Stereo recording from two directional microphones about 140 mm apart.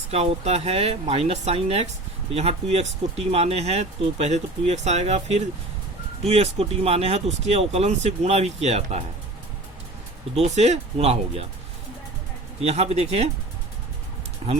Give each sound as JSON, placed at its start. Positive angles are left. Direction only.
{"t": 0.1, "sound": "speech", "side_deg": -50}
{"t": 10.3, "sound": "speech", "side_deg": -50}
{"t": 12.6, "sound": "speech", "side_deg": -50}
{"t": 14.4, "sound": "speech", "side_deg": -45}